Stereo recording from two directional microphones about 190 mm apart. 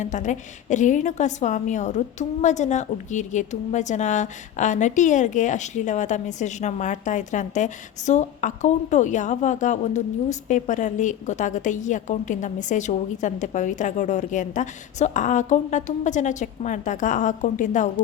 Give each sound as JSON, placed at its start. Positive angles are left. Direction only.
{"t": 0.0, "sound": "a woman's voice", "side_deg": 40}